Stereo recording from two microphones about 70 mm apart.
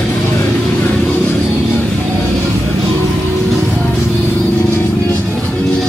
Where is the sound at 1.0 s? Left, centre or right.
Centre.